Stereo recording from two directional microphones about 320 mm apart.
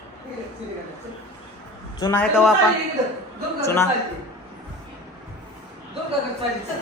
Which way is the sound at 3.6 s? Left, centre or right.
Centre.